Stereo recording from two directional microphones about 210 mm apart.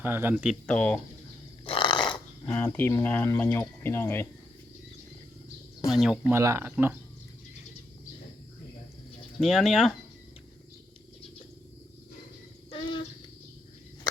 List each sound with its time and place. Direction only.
0.0 s speech: 10° right (ahead or behind)
0.7 s speech: 5° left (ahead or behind)
1.6 s a sound: 25° left (ahead or behind)
2.5 s speech: 10° left (ahead or behind)
5.9 s speech: centre (ahead or behind)
6.3 s speech: 15° right (ahead or behind)
9.4 s speech: centre (ahead or behind)
12.7 s a sound: 25° left (ahead or behind)